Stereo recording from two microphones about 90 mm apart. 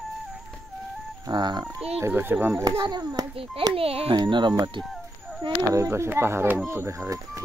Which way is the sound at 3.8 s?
90° right.